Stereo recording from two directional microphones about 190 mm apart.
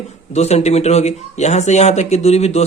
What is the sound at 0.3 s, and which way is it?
A man's voice, 35° left (ahead or behind).